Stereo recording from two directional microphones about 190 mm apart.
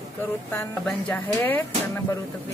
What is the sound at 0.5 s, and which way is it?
A woman's voice, 10° left (ahead or behind).